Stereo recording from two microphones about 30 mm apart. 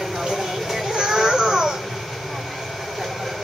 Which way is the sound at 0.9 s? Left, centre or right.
Centre.